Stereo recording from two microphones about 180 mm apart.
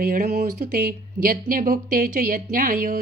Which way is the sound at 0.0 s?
50° right (ahead or behind).